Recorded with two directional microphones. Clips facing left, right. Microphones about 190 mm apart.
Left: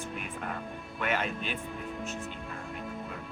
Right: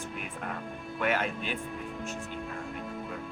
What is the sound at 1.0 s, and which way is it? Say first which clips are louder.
Speech: right 2 dB; 10° right (ahead or behind).